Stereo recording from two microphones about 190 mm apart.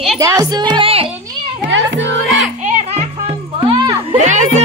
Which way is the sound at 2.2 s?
Centre (ahead or behind).